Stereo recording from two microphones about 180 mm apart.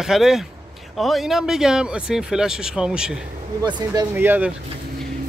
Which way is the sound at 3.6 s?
25° right (ahead or behind).